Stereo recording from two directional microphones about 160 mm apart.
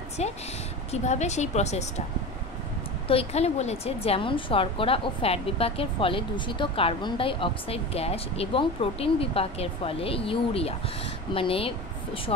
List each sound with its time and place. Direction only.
0.2 s speech: 45° left (ahead or behind)
3.1 s a woman's voice: 40° left (ahead or behind)